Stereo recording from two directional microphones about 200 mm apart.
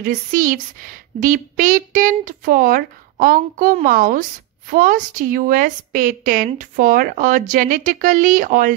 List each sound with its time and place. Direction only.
0.0 s speech: 45° right (ahead or behind)